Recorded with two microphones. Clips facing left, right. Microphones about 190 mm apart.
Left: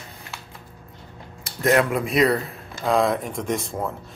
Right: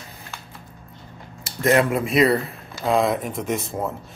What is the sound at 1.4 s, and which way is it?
Speech, centre (ahead or behind).